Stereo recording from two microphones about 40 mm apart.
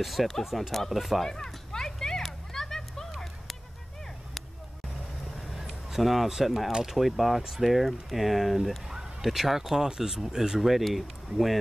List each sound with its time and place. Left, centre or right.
0.0 s speech: centre
1.2 s a sound: centre
5.5 s a sound: centre
6.7 s speech: centre
7.0 s speech: centre
10.7 s speech: centre